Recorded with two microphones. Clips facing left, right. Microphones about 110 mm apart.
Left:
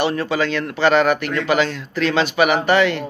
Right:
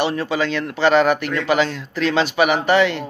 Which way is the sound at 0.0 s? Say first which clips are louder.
Left 1 dB; 20° right (ahead or behind).